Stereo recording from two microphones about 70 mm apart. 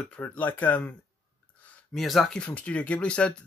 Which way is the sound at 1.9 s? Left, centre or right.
Centre.